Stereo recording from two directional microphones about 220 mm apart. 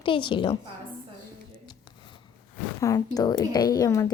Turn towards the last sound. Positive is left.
turn(degrees=15)  # may be behind; listen again after turning